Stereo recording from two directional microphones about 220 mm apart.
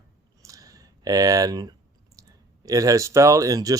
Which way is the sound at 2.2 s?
15° right (ahead or behind).